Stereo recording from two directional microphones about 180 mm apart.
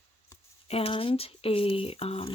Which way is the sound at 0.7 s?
30° left (ahead or behind).